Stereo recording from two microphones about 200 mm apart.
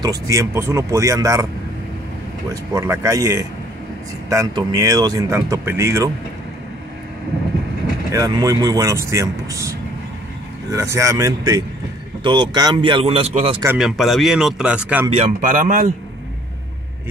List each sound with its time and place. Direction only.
0.3 s speech: 15° right (ahead or behind)
2.5 s speech: 15° right (ahead or behind)
8.1 s a man's voice: 20° right (ahead or behind)
13.7 s speech: centre (ahead or behind)
15.4 s a man's voice: 40° right (ahead or behind)